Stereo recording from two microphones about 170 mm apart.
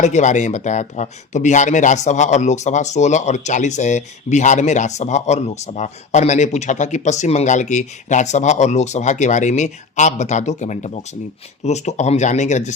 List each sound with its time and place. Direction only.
0.0 s speech: 45° left (ahead or behind)